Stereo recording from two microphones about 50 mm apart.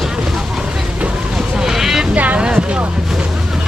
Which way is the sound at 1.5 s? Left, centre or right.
Centre.